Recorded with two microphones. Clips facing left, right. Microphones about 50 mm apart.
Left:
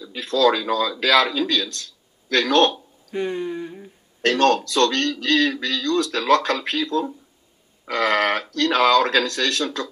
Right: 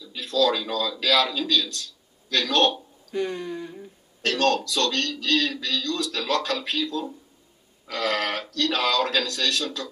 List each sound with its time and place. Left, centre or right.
0.0 s a man's voice: left
4.2 s speech: left